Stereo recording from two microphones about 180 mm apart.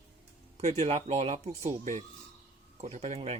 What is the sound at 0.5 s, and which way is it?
Speech, 35° right (ahead or behind).